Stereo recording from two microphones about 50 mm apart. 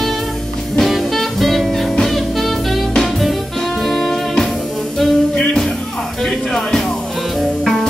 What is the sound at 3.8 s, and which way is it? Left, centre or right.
Music, centre.